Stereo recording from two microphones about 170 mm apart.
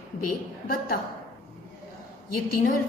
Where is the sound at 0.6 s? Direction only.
60° left (ahead or behind).